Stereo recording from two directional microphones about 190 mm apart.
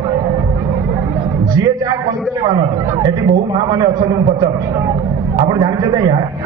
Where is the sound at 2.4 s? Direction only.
20° right (ahead or behind).